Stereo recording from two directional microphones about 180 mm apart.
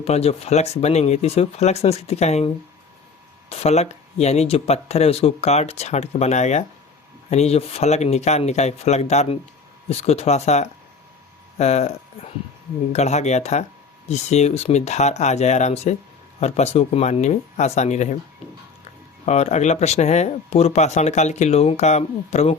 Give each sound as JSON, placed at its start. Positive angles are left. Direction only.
{"t": 0.0, "sound": "speech", "side_deg": 35}
{"t": 3.5, "sound": "speech", "side_deg": 35}
{"t": 19.2, "sound": "speech", "side_deg": 40}